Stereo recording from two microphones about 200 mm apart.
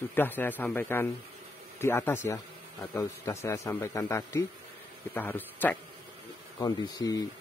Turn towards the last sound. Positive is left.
turn(degrees=20)  # may be behind; listen again after turning